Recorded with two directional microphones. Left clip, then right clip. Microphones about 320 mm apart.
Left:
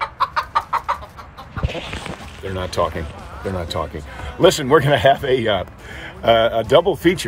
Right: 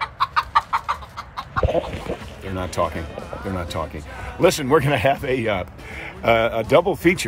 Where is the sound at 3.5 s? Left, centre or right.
Centre.